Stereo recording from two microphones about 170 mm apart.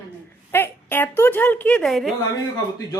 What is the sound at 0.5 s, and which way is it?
A woman's voice, 10° left (ahead or behind).